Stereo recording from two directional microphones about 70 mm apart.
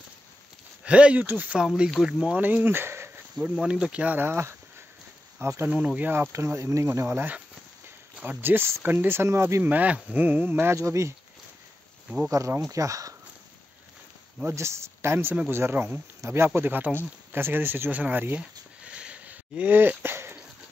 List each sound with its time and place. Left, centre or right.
0.8 s speech: centre
2.0 s speech: centre
2.4 s speech: right
3.3 s speech: centre
4.2 s speech: right
5.7 s speech: centre
6.3 s speech: right
10.7 s speech: right
12.3 s speech: right
14.5 s speech: right
16.2 s speech: right
16.4 s speech: right
18.8 s a sound: centre; by 20.3 s right